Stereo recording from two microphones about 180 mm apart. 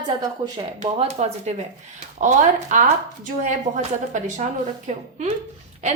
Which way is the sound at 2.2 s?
45° right (ahead or behind).